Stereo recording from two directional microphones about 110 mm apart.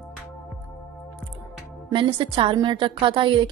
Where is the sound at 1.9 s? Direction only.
50° right (ahead or behind).